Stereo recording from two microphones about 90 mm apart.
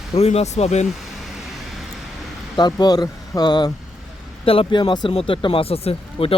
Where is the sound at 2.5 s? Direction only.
50° left (ahead or behind).